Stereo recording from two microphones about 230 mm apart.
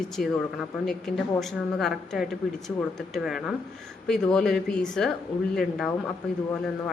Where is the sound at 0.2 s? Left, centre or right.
Left.